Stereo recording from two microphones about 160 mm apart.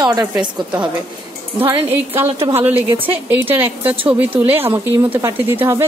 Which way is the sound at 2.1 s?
15° right (ahead or behind).